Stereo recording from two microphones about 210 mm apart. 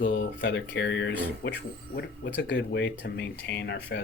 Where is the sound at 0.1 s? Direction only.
55° left (ahead or behind).